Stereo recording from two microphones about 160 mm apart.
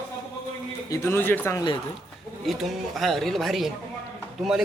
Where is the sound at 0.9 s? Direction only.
15° left (ahead or behind).